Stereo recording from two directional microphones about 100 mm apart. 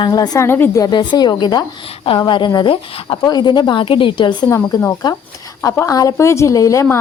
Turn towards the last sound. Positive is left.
turn(degrees=35)  # may be behind; listen again after turning